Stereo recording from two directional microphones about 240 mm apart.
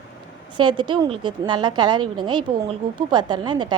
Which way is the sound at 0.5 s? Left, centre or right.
Centre.